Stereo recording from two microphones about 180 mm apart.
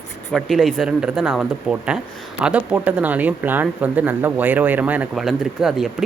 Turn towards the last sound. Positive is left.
turn(degrees=0)  # may be behind; listen again after turning